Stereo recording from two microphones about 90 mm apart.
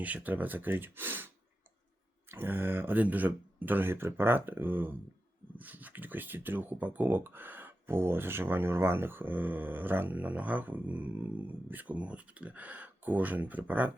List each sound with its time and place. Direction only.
0.0 s speech: 15° right (ahead or behind)
2.3 s speech: 25° right (ahead or behind)